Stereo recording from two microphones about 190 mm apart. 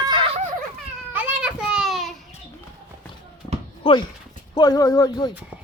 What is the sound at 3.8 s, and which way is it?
Speech, 25° left (ahead or behind).